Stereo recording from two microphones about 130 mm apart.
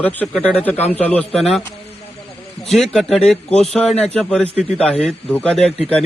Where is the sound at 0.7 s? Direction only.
55° left (ahead or behind).